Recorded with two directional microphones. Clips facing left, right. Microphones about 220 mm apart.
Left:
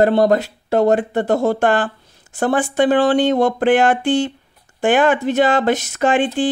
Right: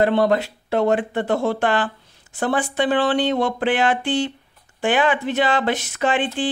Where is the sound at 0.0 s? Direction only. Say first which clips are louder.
Left 4 dB; 40° left (ahead or behind).